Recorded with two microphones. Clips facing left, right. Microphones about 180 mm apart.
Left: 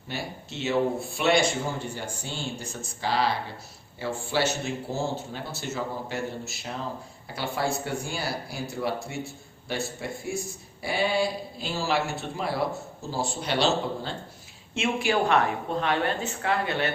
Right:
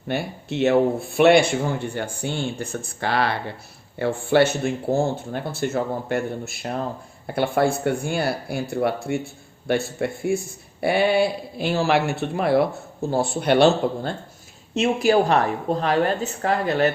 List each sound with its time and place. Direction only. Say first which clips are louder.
0.1 s a man's voice: right 9 dB; 60° right (ahead or behind)
14.7 s a woman's voice: right 7 dB; 40° right (ahead or behind)